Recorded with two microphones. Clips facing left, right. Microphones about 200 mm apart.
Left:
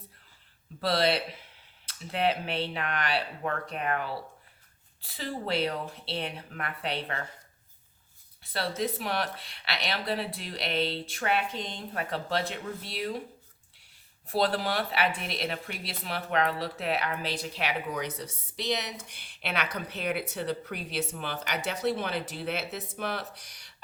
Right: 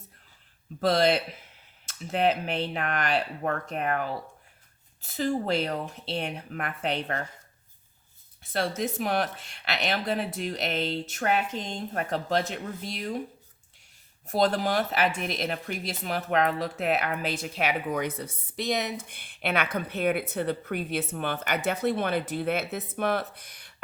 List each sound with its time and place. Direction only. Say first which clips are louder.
0.8 s a woman's voice: right 4 dB; 45° right (ahead or behind)
8.5 s a woman's voice: right 3 dB; 45° right (ahead or behind)
14.3 s a woman's voice: right 3 dB; 45° right (ahead or behind)